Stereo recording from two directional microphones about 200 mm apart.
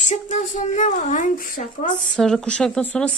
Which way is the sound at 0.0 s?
40° left (ahead or behind).